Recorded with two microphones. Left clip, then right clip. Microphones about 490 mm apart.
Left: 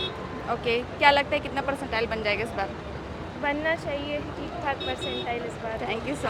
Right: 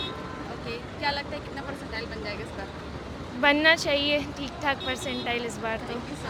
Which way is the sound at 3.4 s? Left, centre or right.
Right.